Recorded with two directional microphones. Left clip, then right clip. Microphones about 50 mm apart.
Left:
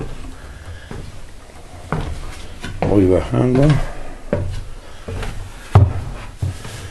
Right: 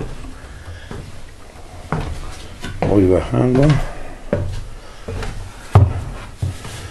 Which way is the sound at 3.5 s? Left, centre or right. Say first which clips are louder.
Even; centre.